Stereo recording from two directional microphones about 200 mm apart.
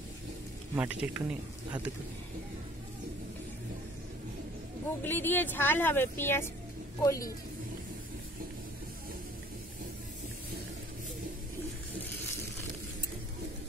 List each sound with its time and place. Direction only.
0.7 s speech: 10° right (ahead or behind)
5.0 s speech: 10° left (ahead or behind)